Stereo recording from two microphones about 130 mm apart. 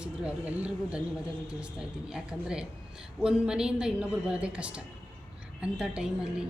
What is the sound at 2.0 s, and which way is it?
A woman's voice, 5° right (ahead or behind).